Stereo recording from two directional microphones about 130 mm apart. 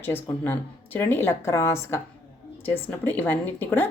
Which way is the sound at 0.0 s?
15° left (ahead or behind).